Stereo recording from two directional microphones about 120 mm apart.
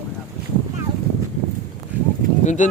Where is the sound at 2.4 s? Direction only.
90° left.